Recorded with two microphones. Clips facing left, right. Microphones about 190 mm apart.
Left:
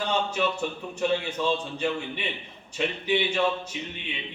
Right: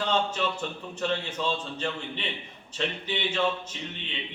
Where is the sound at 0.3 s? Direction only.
10° left (ahead or behind).